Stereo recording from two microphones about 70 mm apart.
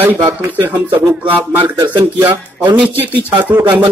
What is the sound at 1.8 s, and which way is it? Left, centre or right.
Speech, right.